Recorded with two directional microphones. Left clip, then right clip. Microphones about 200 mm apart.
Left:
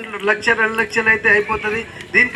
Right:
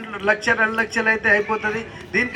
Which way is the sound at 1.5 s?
30° right (ahead or behind).